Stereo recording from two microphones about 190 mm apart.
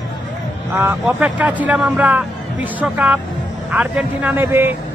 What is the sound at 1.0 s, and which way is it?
Speech, 5° right (ahead or behind).